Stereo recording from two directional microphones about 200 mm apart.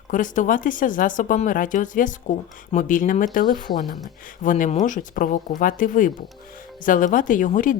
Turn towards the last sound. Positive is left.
turn(degrees=40)  # may be behind; listen again after turning